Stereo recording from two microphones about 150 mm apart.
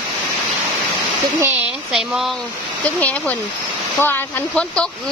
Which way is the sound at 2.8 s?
10° left (ahead or behind).